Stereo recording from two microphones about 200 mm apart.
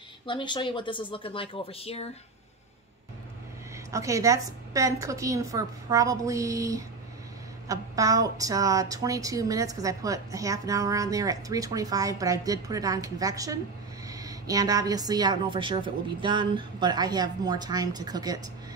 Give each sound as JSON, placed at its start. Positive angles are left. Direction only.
{"t": 0.3, "sound": "speech", "side_deg": 25}
{"t": 3.7, "sound": "a woman's voice", "side_deg": -15}